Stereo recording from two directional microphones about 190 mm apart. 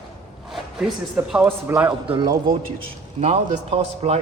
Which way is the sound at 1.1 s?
10° right (ahead or behind).